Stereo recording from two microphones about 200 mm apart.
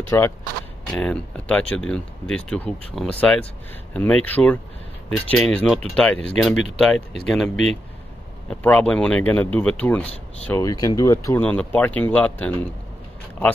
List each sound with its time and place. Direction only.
0.1 s speech: 15° left (ahead or behind)